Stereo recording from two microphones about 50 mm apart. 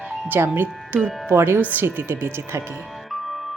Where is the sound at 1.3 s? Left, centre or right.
Right.